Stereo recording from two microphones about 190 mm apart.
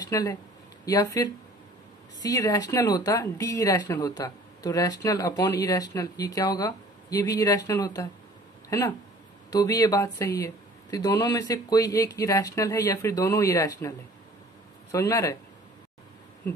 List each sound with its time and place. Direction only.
0.0 s speech: 20° left (ahead or behind)
16.5 s speech: 15° left (ahead or behind)